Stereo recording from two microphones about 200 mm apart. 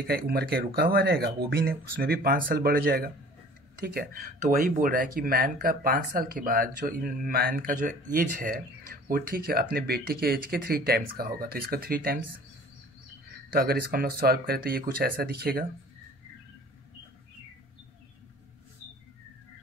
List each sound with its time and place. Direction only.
0.0 s speech: 50° right (ahead or behind)
13.5 s speech: 50° right (ahead or behind)